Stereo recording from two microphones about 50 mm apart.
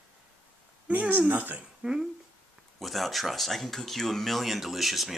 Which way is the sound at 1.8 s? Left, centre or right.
Centre.